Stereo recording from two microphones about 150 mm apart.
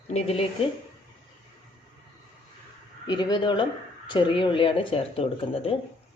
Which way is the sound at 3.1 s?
30° left (ahead or behind).